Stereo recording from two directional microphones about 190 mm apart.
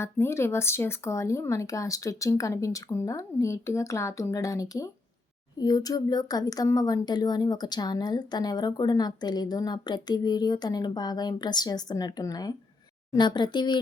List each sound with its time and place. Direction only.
0.0 s speech: 15° left (ahead or behind)